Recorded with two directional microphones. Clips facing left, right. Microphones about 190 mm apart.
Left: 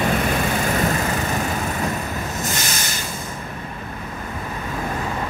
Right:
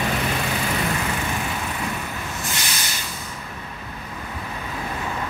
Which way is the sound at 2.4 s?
45° left (ahead or behind).